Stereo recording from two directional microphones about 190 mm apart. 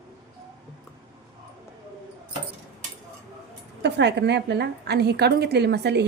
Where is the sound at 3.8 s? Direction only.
65° right (ahead or behind).